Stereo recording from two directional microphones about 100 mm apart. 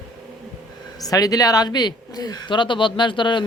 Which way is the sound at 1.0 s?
40° left (ahead or behind).